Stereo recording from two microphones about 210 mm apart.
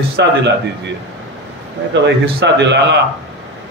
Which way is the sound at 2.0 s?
55° right (ahead or behind).